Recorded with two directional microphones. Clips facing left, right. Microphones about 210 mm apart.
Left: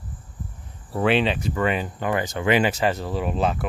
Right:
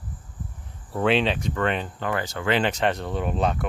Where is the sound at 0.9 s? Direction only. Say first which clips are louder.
Left 1 dB; 5° left (ahead or behind).